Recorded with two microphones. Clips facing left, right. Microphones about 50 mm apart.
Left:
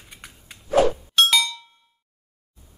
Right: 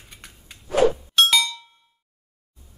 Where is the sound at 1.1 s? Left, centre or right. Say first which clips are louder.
Left 2 dB; centre.